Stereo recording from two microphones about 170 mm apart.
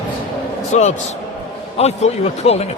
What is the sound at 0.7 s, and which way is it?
A man's voice, 45° left (ahead or behind).